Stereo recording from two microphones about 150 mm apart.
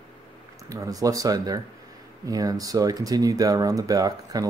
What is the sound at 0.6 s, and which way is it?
Speech, 20° right (ahead or behind).